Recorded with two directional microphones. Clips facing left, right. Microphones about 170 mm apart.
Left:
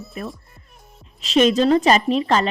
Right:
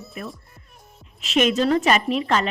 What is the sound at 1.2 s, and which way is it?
A woman's voice, 35° left (ahead or behind).